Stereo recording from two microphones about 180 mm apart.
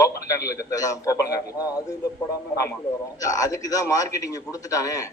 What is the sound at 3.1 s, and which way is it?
A man's voice, 20° left (ahead or behind).